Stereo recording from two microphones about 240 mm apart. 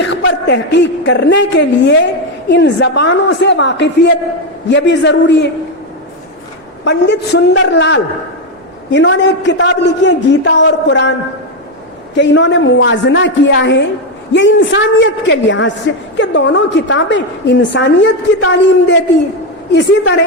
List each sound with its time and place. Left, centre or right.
0.0 s a woman's voice: left
6.8 s a woman's voice: left
12.1 s a woman's voice: left